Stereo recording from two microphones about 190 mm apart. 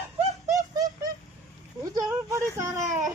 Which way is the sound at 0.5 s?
20° right (ahead or behind).